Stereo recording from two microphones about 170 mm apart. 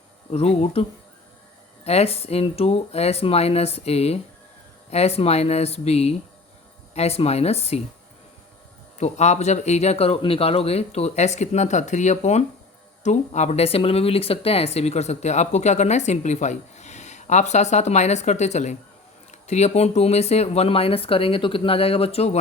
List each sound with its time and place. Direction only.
0.3 s speech: 35° left (ahead or behind)
9.0 s speech: 40° left (ahead or behind)